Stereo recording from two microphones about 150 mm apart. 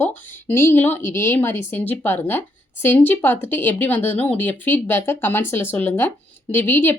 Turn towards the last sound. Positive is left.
turn(degrees=15)  # may be behind; listen again after turning